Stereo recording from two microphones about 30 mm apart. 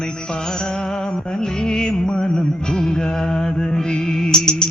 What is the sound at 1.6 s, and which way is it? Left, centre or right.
Music, left.